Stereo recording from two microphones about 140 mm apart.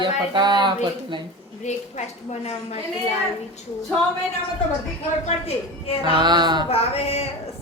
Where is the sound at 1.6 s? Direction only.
50° left (ahead or behind).